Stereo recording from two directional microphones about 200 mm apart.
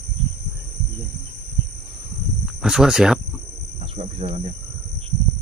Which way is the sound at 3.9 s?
35° right (ahead or behind).